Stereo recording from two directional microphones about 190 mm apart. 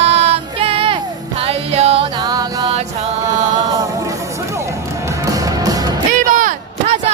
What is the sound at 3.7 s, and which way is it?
Music, 15° right (ahead or behind).